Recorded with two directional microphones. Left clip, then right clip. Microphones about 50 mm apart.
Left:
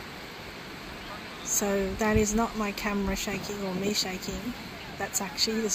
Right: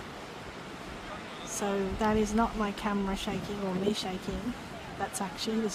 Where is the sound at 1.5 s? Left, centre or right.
Centre.